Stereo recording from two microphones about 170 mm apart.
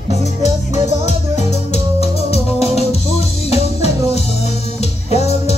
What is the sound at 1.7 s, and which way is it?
Music, 35° left (ahead or behind).